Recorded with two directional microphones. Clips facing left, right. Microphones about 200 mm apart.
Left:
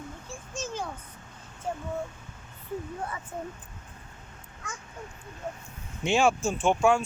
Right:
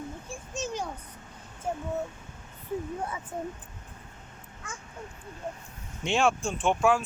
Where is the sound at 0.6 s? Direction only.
15° right (ahead or behind).